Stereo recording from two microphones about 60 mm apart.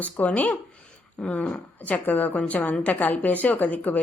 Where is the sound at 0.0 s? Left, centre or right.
Left.